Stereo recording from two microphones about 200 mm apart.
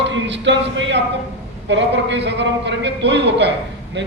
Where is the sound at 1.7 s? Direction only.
60° right (ahead or behind).